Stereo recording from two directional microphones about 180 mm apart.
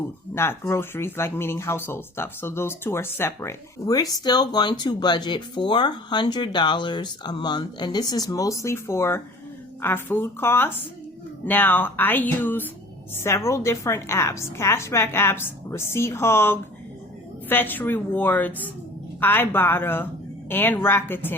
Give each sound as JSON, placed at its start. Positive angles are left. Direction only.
{"t": 0.3, "sound": "a woman's voice", "side_deg": 15}